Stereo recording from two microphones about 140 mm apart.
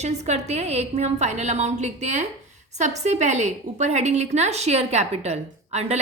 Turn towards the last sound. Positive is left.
turn(degrees=-50)  # may be behind; listen again after turning